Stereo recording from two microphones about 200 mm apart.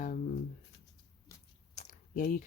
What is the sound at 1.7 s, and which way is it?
Biting, 40° left (ahead or behind).